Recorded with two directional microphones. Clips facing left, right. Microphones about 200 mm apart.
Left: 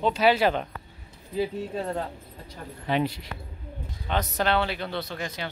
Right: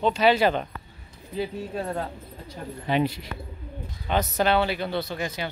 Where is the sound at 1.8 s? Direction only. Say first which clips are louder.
Right 2 dB; centre (ahead or behind).